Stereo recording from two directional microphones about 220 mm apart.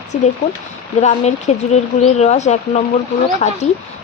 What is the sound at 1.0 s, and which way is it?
Speech, 30° left (ahead or behind).